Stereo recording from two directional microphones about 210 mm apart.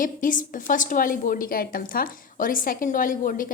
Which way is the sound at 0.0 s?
40° left (ahead or behind).